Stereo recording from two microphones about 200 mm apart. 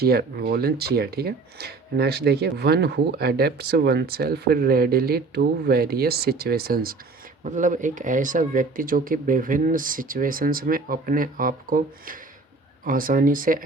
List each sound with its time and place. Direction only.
0.0 s speech: 50° right (ahead or behind)